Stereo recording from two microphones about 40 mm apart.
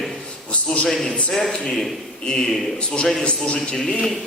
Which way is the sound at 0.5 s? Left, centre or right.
Left.